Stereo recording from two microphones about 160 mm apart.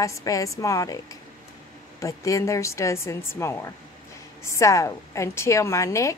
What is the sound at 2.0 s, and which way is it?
Speech, 20° left (ahead or behind).